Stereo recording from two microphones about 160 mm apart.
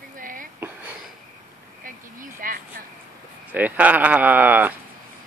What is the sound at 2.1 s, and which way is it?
Vehicle, 60° right (ahead or behind).